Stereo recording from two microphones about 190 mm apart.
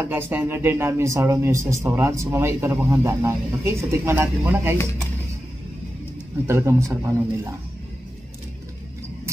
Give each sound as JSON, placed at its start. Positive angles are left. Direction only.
{"t": 0.1, "sound": "speech", "side_deg": -10}
{"t": 6.4, "sound": "speech", "side_deg": -15}